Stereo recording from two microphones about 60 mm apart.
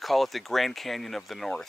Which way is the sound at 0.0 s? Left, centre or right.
Centre.